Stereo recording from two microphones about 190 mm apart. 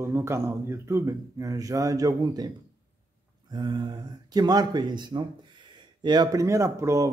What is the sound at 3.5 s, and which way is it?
Speech, 20° right (ahead or behind).